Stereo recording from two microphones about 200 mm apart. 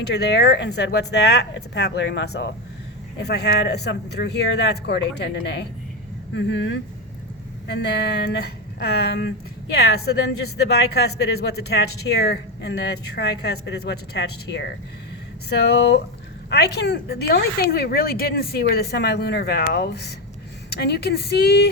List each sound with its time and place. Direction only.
0.1 s a woman's voice: 55° left (ahead or behind)
16.5 s a woman's voice: 55° left (ahead or behind)